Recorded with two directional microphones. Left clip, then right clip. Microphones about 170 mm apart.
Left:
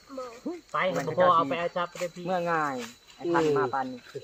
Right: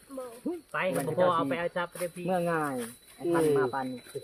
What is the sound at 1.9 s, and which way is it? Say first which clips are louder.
Speech: left 1 dB; 90° right.